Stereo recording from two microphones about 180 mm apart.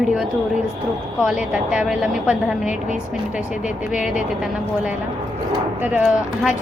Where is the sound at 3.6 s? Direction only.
5° right (ahead or behind).